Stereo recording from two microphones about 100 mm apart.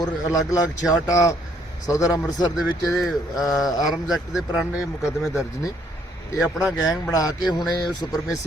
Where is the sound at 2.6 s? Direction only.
5° right (ahead or behind).